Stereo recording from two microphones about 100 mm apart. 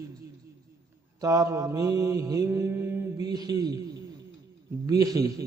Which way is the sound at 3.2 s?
40° right (ahead or behind).